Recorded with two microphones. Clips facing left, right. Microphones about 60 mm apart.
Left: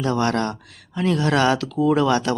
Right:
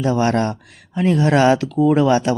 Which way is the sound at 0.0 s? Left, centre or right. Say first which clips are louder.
Right 3 dB; centre.